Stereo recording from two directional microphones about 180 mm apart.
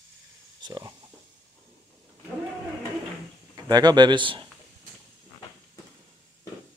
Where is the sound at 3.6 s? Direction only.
20° right (ahead or behind).